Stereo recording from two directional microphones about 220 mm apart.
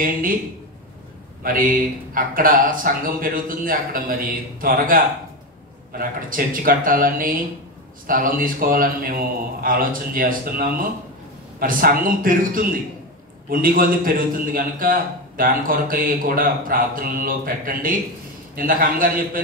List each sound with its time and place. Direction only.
0.0 s a man's voice: 40° right (ahead or behind)
1.4 s a man's voice: 40° right (ahead or behind)